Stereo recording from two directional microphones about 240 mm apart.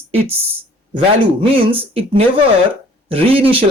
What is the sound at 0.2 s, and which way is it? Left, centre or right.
Speech, right.